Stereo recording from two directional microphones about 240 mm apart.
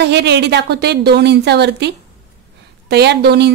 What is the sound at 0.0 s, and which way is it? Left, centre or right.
A woman's voice, right.